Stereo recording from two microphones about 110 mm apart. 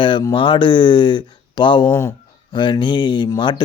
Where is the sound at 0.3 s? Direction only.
50° left (ahead or behind).